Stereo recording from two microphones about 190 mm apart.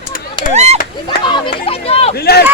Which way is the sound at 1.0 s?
25° left (ahead or behind).